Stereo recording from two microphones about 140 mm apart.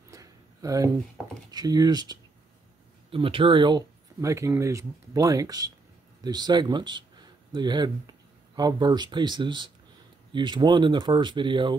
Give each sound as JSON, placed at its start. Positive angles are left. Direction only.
{"t": 0.1, "sound": "a sound", "side_deg": -25}
{"t": 1.5, "sound": "speech", "side_deg": -30}
{"t": 3.1, "sound": "speech", "side_deg": -40}